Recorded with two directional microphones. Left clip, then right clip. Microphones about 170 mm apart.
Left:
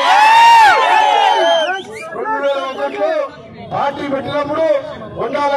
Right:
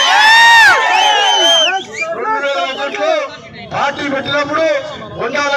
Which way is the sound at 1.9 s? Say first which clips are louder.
Right 4 dB; 30° left (ahead or behind).